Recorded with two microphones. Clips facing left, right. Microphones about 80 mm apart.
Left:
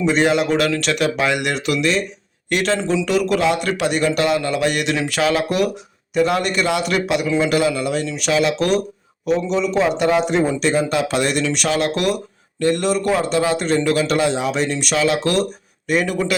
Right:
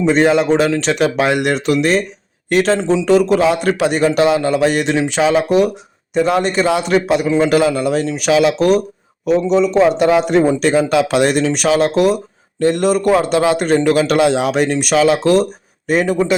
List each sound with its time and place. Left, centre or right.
0.0 s a man's voice: right
1.1 s a man's voice: right
5.1 s a man's voice: right
8.5 s a man's voice: right
10.2 s speech: right
14.2 s speech: right
14.5 s speech: right
15.2 s a man's voice: right